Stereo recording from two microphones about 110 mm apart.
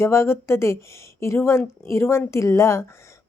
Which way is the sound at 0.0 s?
25° left (ahead or behind).